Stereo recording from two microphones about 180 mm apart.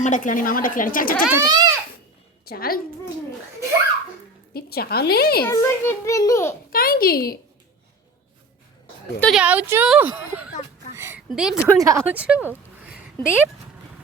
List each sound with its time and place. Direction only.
0.0 s speech: 45° left (ahead or behind)
1.3 s speech: 20° right (ahead or behind)
2.4 s a woman's voice: 55° left (ahead or behind)
4.5 s a woman's voice: 60° left (ahead or behind)
5.4 s a child's voice: 15° left (ahead or behind)
6.7 s a woman's voice: 55° left (ahead or behind)
9.2 s a woman's voice: 5° right (ahead or behind)
10.9 s a sound: 15° right (ahead or behind)
11.3 s a woman's voice: 5° right (ahead or behind)
11.8 s a woman's voice: 15° right (ahead or behind)